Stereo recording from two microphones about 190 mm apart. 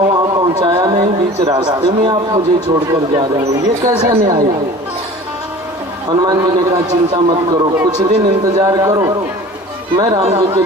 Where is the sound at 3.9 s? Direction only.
20° right (ahead or behind).